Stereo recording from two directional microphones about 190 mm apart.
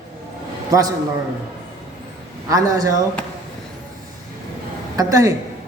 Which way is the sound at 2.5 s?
20° right (ahead or behind).